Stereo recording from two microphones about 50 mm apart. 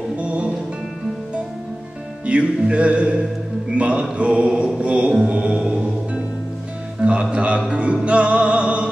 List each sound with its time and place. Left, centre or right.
0.2 s music: right
2.2 s mantra: right
5.1 s music: centre
7.0 s speech: centre
7.6 s mantra: right